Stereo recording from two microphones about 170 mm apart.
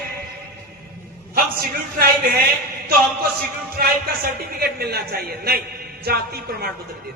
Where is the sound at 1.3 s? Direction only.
60° right (ahead or behind).